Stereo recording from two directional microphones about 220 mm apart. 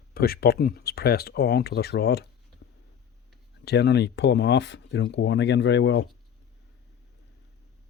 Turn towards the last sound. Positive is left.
turn(degrees=55)  # may be behind; listen again after turning